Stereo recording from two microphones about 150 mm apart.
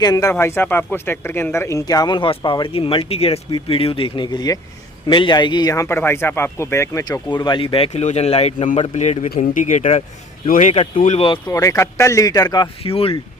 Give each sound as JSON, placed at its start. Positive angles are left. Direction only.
{"t": 0.0, "sound": "speech", "side_deg": 25}
{"t": 11.5, "sound": "speech", "side_deg": 20}
{"t": 12.8, "sound": "speech", "side_deg": 40}